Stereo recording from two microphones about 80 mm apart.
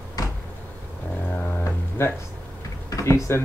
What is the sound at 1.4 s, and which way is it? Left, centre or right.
Music, left.